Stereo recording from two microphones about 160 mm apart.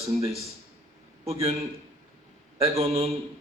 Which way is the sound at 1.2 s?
40° right (ahead or behind).